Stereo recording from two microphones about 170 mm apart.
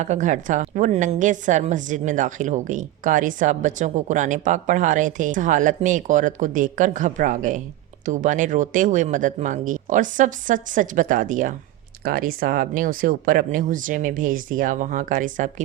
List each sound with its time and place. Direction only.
0.0 s a woman's voice: 45° right (ahead or behind)